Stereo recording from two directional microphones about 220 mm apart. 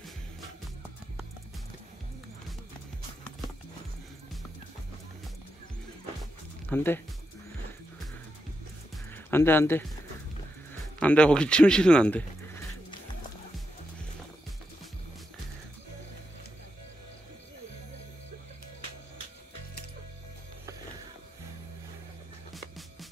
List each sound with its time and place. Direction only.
6.7 s speech: 10° left (ahead or behind)
8.9 s music: 10° left (ahead or behind)
11.0 s speech: 5° left (ahead or behind)
22.5 s music: centre (ahead or behind)